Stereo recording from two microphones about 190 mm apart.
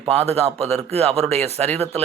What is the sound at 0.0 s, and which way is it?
A man's voice, 35° right (ahead or behind).